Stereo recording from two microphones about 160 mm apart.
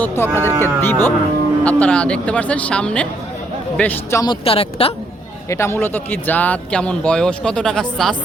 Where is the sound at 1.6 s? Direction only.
10° left (ahead or behind).